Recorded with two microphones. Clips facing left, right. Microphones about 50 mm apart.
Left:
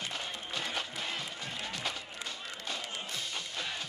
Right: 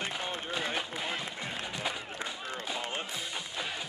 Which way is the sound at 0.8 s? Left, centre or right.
Centre.